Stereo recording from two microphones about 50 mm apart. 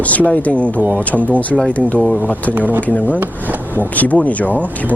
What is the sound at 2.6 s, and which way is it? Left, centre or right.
Speech, right.